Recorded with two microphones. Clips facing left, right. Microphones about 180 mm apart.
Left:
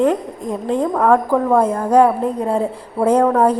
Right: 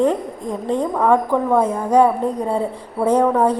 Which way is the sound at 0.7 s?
Centre (ahead or behind).